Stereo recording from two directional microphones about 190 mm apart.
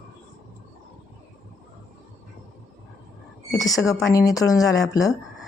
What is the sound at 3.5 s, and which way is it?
A woman's voice, 20° left (ahead or behind).